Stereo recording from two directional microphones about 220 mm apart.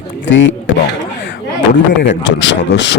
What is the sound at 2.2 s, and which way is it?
Speech, 55° left (ahead or behind).